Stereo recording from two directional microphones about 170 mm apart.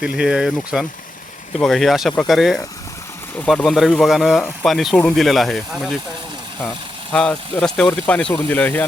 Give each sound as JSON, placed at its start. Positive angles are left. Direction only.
{"t": 0.0, "sound": "speech", "side_deg": -5}
{"t": 7.1, "sound": "speech", "side_deg": 5}